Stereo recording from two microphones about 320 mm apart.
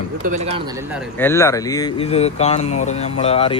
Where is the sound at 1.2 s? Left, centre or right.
Centre.